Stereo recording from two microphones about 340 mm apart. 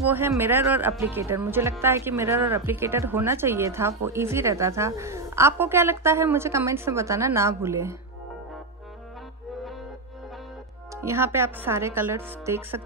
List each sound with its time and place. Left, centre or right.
0.1 s speech: centre
11.0 s speech: centre